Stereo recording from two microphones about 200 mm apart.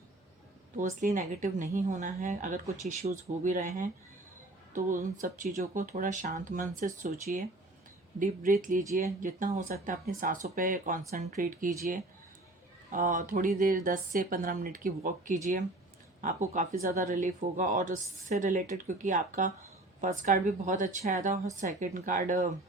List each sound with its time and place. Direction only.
0.8 s speech: 40° right (ahead or behind)
5.2 s speech: 40° right (ahead or behind)